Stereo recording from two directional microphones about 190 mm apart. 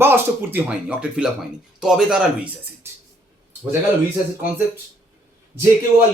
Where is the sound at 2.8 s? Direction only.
15° right (ahead or behind).